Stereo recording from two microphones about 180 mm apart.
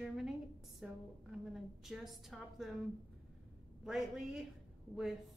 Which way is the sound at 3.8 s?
Centre (ahead or behind).